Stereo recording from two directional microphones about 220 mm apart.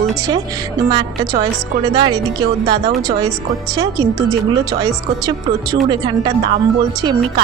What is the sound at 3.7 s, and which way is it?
A woman's voice, 15° right (ahead or behind).